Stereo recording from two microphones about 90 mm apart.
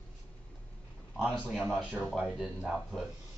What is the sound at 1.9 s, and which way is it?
Speech, 10° left (ahead or behind).